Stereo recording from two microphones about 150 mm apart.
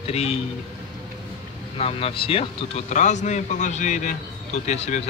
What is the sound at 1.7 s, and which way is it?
Speech, 40° left (ahead or behind).